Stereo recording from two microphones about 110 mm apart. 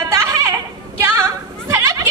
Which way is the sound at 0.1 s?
25° right (ahead or behind).